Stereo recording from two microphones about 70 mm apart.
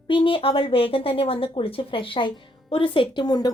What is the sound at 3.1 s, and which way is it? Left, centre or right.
Speech, left.